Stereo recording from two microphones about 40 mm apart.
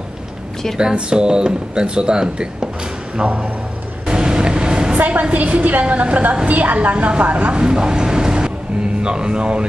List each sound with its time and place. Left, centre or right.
0.9 s speech: right
4.1 s vehicle: right
4.9 s a woman's voice: right
5.2 s a woman's voice: right
7.5 s speech: centre